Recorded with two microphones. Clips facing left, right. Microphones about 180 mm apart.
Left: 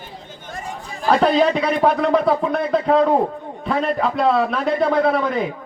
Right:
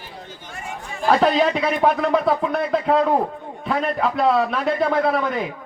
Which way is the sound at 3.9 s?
Centre (ahead or behind).